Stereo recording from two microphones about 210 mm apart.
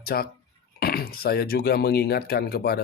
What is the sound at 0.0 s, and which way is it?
Speech, 45° left (ahead or behind).